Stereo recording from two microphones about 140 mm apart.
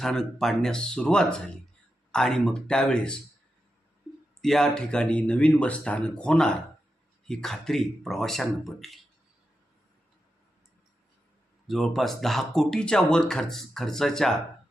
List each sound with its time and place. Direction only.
0.0 s speech: 5° left (ahead or behind)
4.4 s speech: centre (ahead or behind)
11.7 s speech: centre (ahead or behind)